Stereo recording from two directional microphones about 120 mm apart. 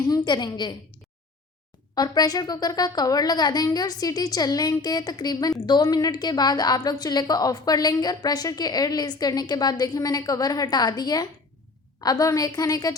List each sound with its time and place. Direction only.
0.1 s a woman's voice: 35° left (ahead or behind)
2.0 s a woman's voice: 30° left (ahead or behind)